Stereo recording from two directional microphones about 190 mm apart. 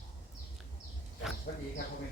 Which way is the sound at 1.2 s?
5° right (ahead or behind).